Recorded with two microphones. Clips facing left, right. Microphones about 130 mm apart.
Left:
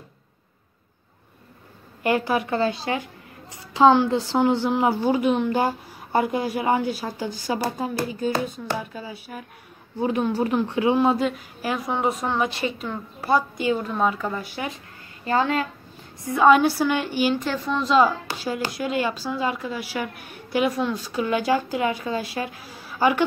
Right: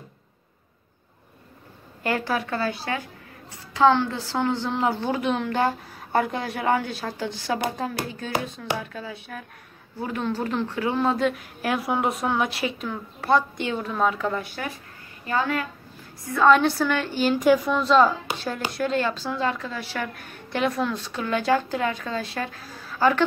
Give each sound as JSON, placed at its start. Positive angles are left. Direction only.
{"t": 2.0, "sound": "a woman's voice", "side_deg": 15}
{"t": 15.2, "sound": "a woman's voice", "side_deg": 30}
{"t": 16.3, "sound": "a woman's voice", "side_deg": 10}
{"t": 17.4, "sound": "a woman's voice", "side_deg": -10}
{"t": 17.8, "sound": "a woman's voice", "side_deg": 5}